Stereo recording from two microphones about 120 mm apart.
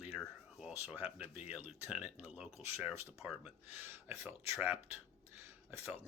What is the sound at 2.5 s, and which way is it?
Speech, centre (ahead or behind).